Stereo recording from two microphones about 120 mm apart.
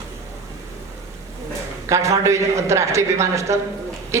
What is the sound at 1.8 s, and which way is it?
A woman's voice, 25° right (ahead or behind).